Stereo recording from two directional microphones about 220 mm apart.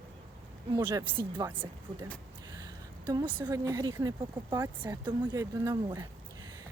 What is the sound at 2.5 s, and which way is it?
Speech, 15° right (ahead or behind).